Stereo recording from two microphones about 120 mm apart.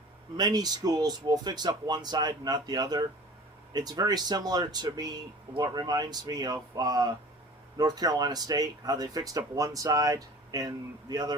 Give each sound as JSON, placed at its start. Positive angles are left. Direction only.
{"t": 0.3, "sound": "speech", "side_deg": -35}